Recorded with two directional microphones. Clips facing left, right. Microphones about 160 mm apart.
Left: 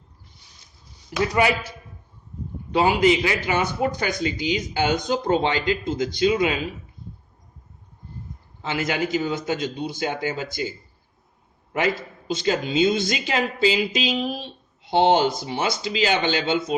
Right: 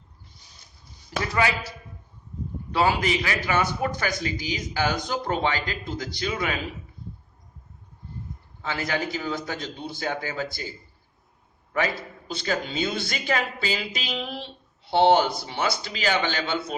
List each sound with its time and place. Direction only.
1.2 s a man's voice: 20° left (ahead or behind)
2.7 s a man's voice: 20° left (ahead or behind)
8.6 s a man's voice: 20° left (ahead or behind)
12.3 s a man's voice: 20° left (ahead or behind)